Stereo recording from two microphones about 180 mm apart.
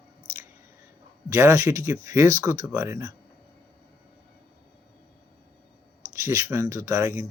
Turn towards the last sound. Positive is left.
turn(degrees=-15)  # may be behind; listen again after turning